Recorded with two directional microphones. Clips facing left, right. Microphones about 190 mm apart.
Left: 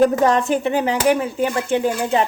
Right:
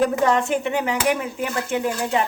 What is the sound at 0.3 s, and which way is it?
A woman's voice, 35° left (ahead or behind).